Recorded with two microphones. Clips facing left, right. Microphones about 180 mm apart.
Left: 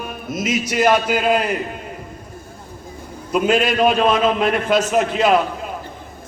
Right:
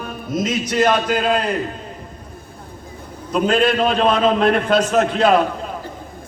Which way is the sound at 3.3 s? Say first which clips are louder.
Right 1 dB; 10° left (ahead or behind).